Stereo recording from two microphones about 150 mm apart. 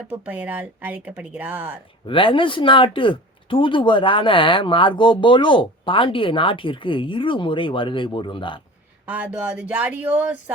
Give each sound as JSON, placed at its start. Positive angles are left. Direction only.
{"t": 0.1, "sound": "speech", "side_deg": -10}
{"t": 2.0, "sound": "speech", "side_deg": 35}
{"t": 9.0, "sound": "speech", "side_deg": -10}